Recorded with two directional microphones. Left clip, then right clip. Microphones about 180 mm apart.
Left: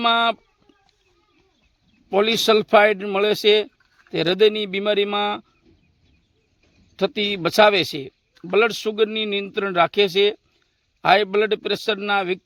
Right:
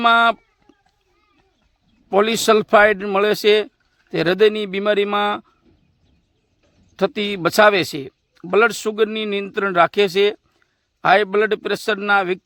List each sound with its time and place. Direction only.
0.0 s a sound: 20° right (ahead or behind)
2.0 s speech: 20° right (ahead or behind)
6.9 s a man's voice: 20° right (ahead or behind)